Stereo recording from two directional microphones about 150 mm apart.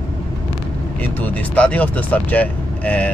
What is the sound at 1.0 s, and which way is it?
Speech, 10° left (ahead or behind).